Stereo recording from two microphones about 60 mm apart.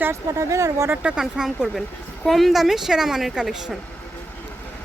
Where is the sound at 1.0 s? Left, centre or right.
Centre.